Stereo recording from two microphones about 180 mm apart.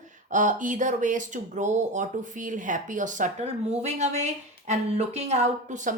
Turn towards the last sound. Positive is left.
turn(degrees=-40)  # may be behind; listen again after turning